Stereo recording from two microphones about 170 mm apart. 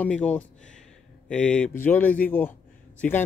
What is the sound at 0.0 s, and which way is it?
Speech, 10° left (ahead or behind).